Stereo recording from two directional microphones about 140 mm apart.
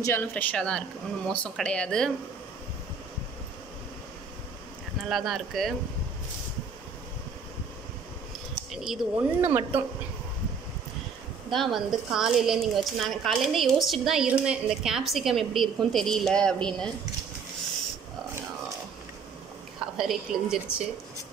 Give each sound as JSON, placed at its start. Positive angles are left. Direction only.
{"t": 0.0, "sound": "speech", "side_deg": 15}
{"t": 5.0, "sound": "a woman's voice", "side_deg": 0}
{"t": 8.7, "sound": "speech", "side_deg": -5}
{"t": 11.5, "sound": "a woman's voice", "side_deg": 0}
{"t": 20.0, "sound": "a woman's voice", "side_deg": -5}